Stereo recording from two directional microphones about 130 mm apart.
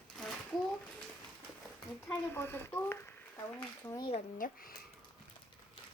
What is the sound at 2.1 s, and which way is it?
Speech, 20° left (ahead or behind).